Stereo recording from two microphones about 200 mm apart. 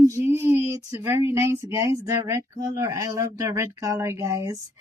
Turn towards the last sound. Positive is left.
turn(degrees=-15)  # may be behind; listen again after turning